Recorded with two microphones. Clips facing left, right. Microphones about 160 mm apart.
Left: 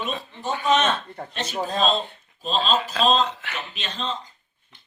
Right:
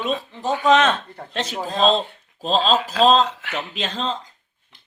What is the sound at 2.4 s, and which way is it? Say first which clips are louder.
A man's voice: right 4 dB; 90° right.